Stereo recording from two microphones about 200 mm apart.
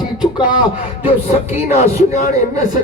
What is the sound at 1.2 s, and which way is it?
Speech, 30° left (ahead or behind).